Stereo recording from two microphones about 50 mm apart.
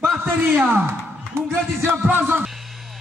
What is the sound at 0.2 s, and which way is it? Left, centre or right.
Speech, right.